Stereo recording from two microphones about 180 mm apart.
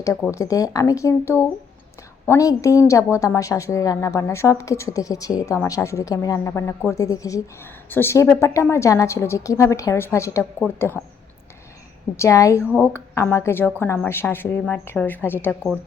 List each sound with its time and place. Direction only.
0.0 s a woman's voice: 15° left (ahead or behind)
12.1 s a woman's voice: 15° left (ahead or behind)